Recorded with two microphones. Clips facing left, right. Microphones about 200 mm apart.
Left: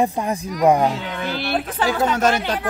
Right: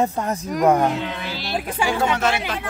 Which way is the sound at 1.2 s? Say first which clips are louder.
Left 4 dB; 55° left (ahead or behind).